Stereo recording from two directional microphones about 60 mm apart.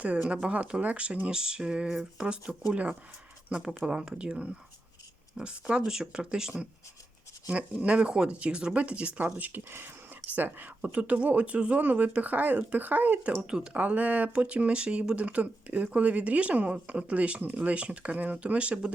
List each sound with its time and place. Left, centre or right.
0.0 s speech: right
3.5 s speech: centre
7.4 s speech: right
13.5 s speech: centre